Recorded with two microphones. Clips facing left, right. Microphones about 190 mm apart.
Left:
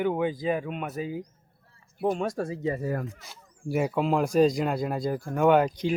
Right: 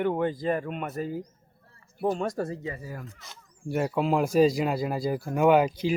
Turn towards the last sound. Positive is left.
turn(degrees=-5)  # may be behind; listen again after turning